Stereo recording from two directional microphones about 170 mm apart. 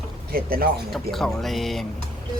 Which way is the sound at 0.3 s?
60° right (ahead or behind).